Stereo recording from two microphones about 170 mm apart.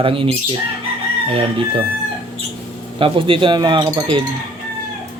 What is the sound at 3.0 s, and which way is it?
Speech, 30° right (ahead or behind).